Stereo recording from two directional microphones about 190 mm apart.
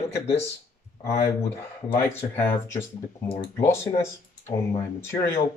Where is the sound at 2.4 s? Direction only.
10° left (ahead or behind).